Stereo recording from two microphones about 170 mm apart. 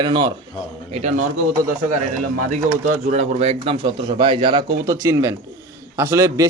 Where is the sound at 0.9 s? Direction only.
45° right (ahead or behind).